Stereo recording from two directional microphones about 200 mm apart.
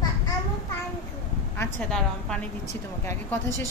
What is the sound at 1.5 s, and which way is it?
Speech, 10° left (ahead or behind).